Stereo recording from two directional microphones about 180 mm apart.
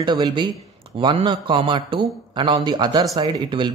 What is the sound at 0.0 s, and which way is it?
Speech, 25° right (ahead or behind).